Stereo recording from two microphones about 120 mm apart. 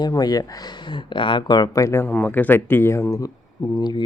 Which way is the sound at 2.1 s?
15° left (ahead or behind).